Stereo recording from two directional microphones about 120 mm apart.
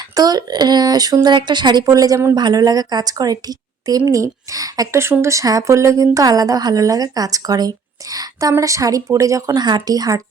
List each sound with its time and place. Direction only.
0.2 s a woman's voice: 35° right (ahead or behind)